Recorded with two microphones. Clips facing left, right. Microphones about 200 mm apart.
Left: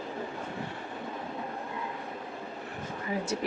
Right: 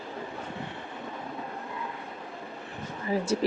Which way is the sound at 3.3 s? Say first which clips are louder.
Right 7 dB; 35° right (ahead or behind).